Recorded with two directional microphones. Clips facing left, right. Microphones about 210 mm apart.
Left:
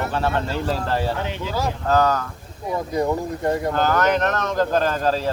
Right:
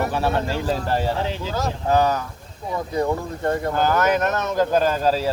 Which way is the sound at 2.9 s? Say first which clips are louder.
Even; 10° left (ahead or behind).